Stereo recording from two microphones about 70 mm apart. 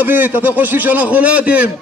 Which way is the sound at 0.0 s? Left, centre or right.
Right.